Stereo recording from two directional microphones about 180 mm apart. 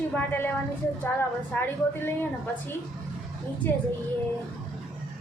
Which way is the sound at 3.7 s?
10° left (ahead or behind).